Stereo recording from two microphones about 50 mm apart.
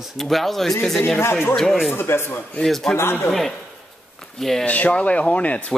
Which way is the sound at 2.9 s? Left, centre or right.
Left.